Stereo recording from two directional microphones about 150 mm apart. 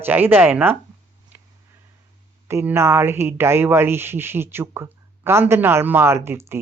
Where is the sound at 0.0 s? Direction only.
15° right (ahead or behind).